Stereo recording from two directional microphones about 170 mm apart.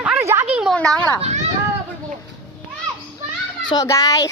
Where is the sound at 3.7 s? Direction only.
20° left (ahead or behind).